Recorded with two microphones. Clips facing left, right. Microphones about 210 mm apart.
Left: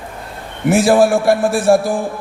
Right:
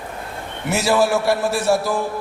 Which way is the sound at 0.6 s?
50° left (ahead or behind).